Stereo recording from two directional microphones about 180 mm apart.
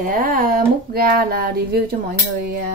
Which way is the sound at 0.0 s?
50° right (ahead or behind).